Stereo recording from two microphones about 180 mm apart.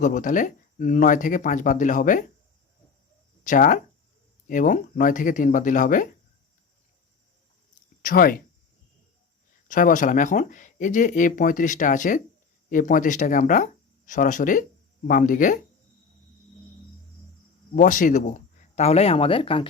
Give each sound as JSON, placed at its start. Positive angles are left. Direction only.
{"t": 0.0, "sound": "speech", "side_deg": 45}
{"t": 3.4, "sound": "speech", "side_deg": 45}
{"t": 8.0, "sound": "speech", "side_deg": 50}
{"t": 9.6, "sound": "speech", "side_deg": 45}
{"t": 17.7, "sound": "speech", "side_deg": 45}